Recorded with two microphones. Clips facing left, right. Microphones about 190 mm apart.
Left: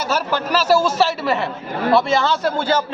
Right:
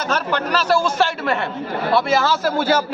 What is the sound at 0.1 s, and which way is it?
A man's voice, 5° left (ahead or behind).